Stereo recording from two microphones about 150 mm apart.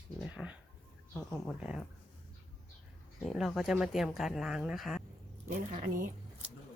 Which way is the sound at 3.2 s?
Centre (ahead or behind).